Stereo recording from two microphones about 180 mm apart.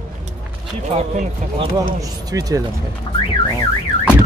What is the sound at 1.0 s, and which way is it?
Speech, 35° right (ahead or behind).